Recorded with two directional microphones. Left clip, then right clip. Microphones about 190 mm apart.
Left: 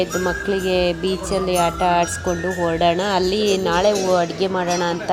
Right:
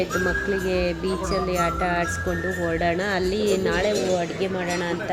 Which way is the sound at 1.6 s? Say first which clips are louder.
Left 9 dB; 15° right (ahead or behind).